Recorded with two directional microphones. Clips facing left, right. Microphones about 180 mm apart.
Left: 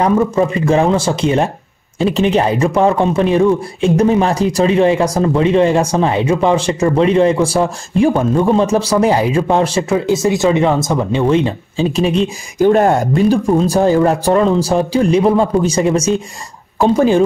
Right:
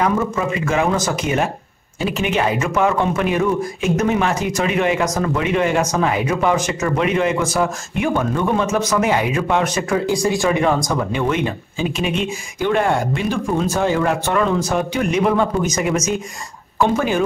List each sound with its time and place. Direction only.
0.0 s a man's voice: 35° left (ahead or behind)